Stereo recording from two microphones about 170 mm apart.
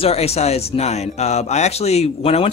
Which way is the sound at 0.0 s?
35° left (ahead or behind).